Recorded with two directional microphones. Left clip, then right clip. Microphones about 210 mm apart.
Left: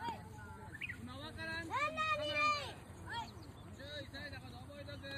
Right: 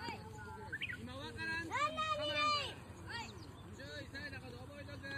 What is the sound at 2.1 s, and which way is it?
Vehicle, 20° left (ahead or behind).